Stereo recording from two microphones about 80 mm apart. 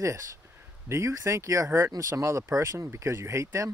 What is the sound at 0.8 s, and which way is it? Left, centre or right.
Speech, right.